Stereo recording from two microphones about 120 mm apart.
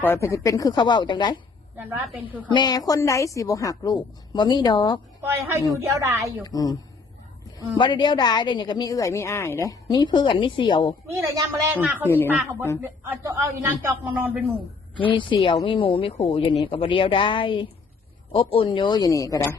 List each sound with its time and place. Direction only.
0.0 s speech: 20° left (ahead or behind); by 1.4 s 40° left (ahead or behind)
1.8 s a woman's voice: 15° right (ahead or behind)
2.5 s a woman's voice: 35° left (ahead or behind)
5.2 s a man's voice: 20° right (ahead or behind)
6.4 s speech: 30° left (ahead or behind)
7.8 s speech: 40° left (ahead or behind)
11.1 s a man's voice: 25° right (ahead or behind)
11.7 s a woman's voice: 15° right (ahead or behind)
12.0 s speech: 15° left (ahead or behind)
12.8 s a man's voice: 25° right (ahead or behind)
14.0 s a woman's voice: 15° right (ahead or behind)
15.1 s speech: 45° left (ahead or behind); by 19.5 s 25° left (ahead or behind)